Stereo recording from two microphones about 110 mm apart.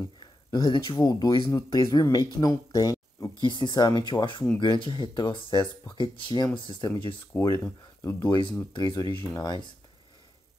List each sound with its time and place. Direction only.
0.2 s speech: 40° left (ahead or behind)
3.4 s speech: 45° left (ahead or behind)
7.3 s speech: 25° left (ahead or behind)
8.7 s speech: 40° left (ahead or behind)